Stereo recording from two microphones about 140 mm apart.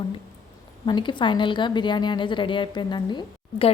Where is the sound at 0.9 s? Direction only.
35° left (ahead or behind).